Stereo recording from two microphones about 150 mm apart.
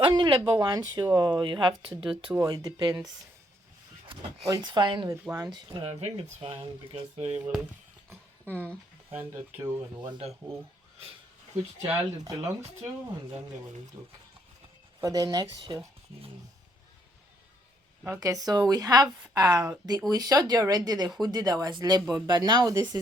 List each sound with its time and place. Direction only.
0.0 s speech: 30° right (ahead or behind)
4.1 s speech: 25° right (ahead or behind)
5.1 s speech: 15° right (ahead or behind)
5.5 s speech: 30° right (ahead or behind)
5.9 s speech: 45° right (ahead or behind)
7.4 s speech: 10° right (ahead or behind)
10.0 s speech: 30° right (ahead or behind)
11.8 s speech: 20° right (ahead or behind)
15.0 s speech: 25° right (ahead or behind)
18.0 s speech: 20° right (ahead or behind)